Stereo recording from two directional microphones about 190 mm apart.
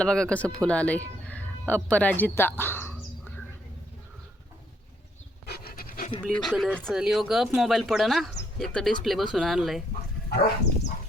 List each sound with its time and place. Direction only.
0.0 s speech: 5° left (ahead or behind)
5.5 s pant: 55° left (ahead or behind)
6.4 s speech: centre (ahead or behind)
10.2 s a sound: 55° left (ahead or behind)